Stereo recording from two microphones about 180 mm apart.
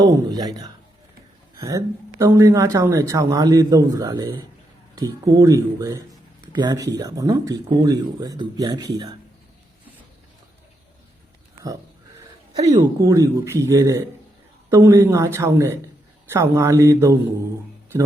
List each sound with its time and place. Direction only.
0.0 s speech: 20° right (ahead or behind)
12.6 s speech: 20° right (ahead or behind)